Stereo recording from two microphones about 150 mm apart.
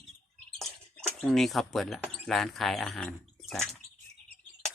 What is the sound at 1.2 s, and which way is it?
Speech, centre (ahead or behind).